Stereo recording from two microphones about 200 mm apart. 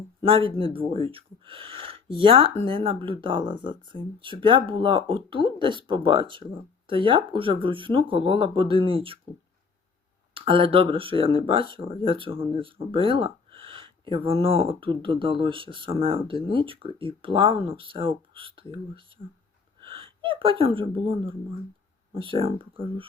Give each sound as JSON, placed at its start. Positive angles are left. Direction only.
{"t": 0.3, "sound": "speech", "side_deg": -25}
{"t": 10.3, "sound": "speech", "side_deg": -25}